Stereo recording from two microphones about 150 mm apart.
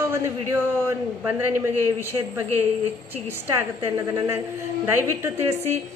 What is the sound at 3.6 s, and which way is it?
Speech, 20° right (ahead or behind).